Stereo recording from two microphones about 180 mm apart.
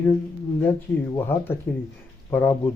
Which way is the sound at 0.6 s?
10° left (ahead or behind).